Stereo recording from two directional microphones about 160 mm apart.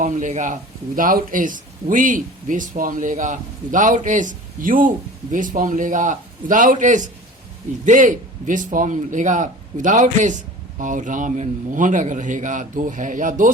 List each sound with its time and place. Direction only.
0.0 s speech: 50° right (ahead or behind)